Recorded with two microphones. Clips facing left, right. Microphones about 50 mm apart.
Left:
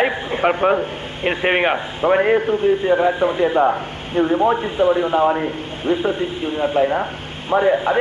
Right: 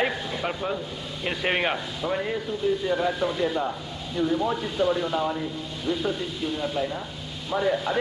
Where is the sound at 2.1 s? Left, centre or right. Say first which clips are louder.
Left 14 dB; left.